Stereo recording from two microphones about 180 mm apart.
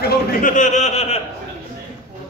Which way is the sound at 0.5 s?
45° left (ahead or behind).